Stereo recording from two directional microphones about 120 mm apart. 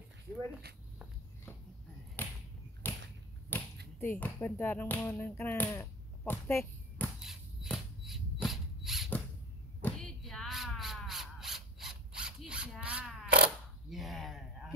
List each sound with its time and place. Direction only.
2.2 s a sound: 15° left (ahead or behind)
3.4 s speech: 15° left (ahead or behind)
6.3 s whip: 20° left (ahead or behind)
7.6 s rodents: centre (ahead or behind)
9.8 s squawk: 10° left (ahead or behind); by 12.7 s 10° right (ahead or behind)
12.8 s a sound: 5° right (ahead or behind)